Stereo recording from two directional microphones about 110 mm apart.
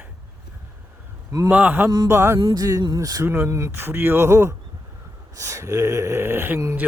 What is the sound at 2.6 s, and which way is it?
Speech, 35° right (ahead or behind).